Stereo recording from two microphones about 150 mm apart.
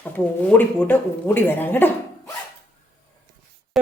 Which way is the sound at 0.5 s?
10° left (ahead or behind).